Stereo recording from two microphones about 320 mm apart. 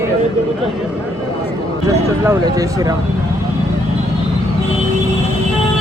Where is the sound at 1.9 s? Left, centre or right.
Centre.